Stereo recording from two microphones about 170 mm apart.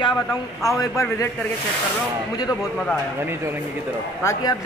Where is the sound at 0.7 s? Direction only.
20° left (ahead or behind).